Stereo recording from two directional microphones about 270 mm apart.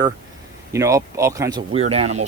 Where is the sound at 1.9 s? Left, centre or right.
Right.